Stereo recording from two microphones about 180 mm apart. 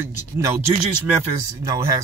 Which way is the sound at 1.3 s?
20° right (ahead or behind).